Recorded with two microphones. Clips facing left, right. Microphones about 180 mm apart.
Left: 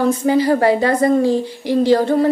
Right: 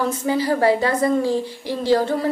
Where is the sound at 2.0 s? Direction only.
55° left (ahead or behind).